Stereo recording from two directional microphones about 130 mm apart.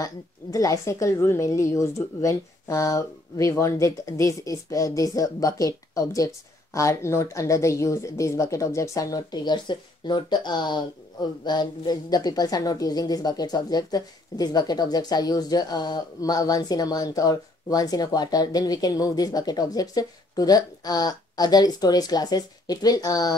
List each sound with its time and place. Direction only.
0.0 s a woman's voice: 25° left (ahead or behind)